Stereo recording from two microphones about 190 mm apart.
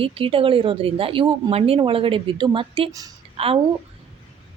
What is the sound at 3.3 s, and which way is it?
Speech, 30° right (ahead or behind).